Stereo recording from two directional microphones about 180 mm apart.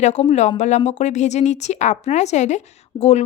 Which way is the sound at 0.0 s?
40° left (ahead or behind).